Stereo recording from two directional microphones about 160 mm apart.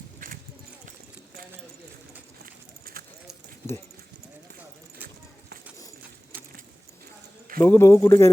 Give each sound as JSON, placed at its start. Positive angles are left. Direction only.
{"t": 0.2, "sound": "clip-clop", "side_deg": -55}
{"t": 2.9, "sound": "clip-clop", "side_deg": -65}
{"t": 7.6, "sound": "speech", "side_deg": 15}